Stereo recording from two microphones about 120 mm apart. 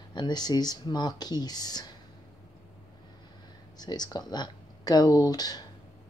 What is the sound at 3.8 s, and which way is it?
Speech, 35° left (ahead or behind).